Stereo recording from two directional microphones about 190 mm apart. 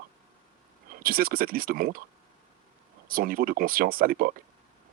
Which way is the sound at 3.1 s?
50° right (ahead or behind).